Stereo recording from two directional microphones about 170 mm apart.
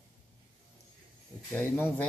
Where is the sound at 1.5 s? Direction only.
10° left (ahead or behind).